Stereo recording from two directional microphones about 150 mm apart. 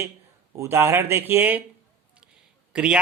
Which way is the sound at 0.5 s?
20° right (ahead or behind).